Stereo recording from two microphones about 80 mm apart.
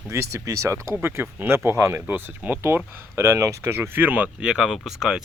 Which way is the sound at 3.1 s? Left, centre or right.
Right.